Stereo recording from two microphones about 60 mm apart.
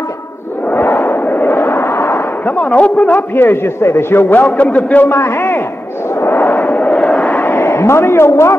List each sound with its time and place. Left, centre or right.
0.7 s a sound: left
2.4 s a man's voice: left
3.3 s a man's voice: left
5.1 s a man's voice: left
6.2 s vehicle: left
7.4 s a man's voice: left